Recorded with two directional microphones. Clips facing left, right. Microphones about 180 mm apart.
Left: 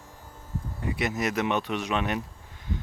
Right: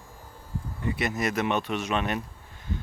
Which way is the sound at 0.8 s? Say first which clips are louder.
Even; 15° left (ahead or behind).